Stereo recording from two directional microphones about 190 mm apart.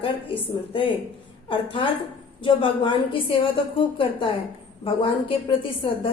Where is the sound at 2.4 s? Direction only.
25° left (ahead or behind).